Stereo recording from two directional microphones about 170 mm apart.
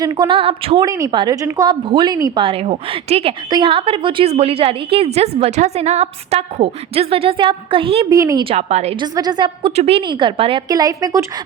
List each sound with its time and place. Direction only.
0.0 s a woman's voice: 25° right (ahead or behind)
0.9 s a woman's voice: 20° right (ahead or behind)
8.1 s a woman's voice: 20° right (ahead or behind)
8.4 s a woman's voice: 40° right (ahead or behind)
9.0 s a woman's voice: 25° right (ahead or behind)
10.7 s a woman's voice: 20° right (ahead or behind)